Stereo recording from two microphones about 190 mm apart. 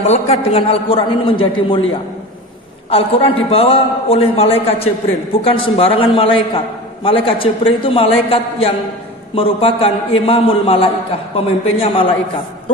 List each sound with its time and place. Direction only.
0.1 s a man's voice: 30° left (ahead or behind)
2.9 s a man's voice: 30° left (ahead or behind)